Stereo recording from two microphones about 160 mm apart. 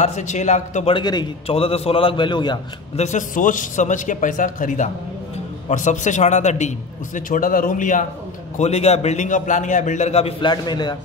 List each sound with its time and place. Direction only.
0.0 s a man's voice: 45° left (ahead or behind)
0.9 s a man's voice: 25° left (ahead or behind)
1.5 s a man's voice: 35° left (ahead or behind)
3.0 s a man's voice: 50° left (ahead or behind)
7.2 s speech: 60° left (ahead or behind)
8.5 s a man's voice: 45° left (ahead or behind)
10.4 s a man's voice: 25° left (ahead or behind)